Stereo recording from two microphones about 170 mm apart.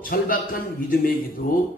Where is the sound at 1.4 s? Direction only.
55° left (ahead or behind).